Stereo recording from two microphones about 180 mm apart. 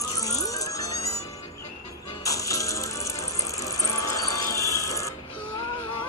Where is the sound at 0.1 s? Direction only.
20° left (ahead or behind).